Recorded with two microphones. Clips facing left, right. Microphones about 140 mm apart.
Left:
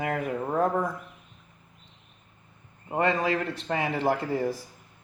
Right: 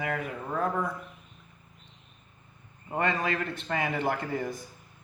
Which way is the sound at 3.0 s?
25° left (ahead or behind).